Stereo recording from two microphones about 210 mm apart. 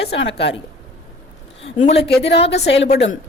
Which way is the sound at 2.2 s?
55° left (ahead or behind).